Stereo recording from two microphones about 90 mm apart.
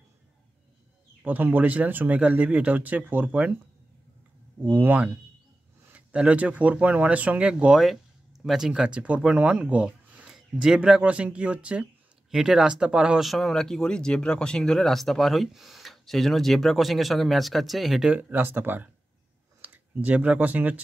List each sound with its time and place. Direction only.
1.2 s speech: 20° right (ahead or behind)
4.6 s speech: 20° right (ahead or behind); by 18.1 s centre (ahead or behind)
18.1 s speech: 20° right (ahead or behind)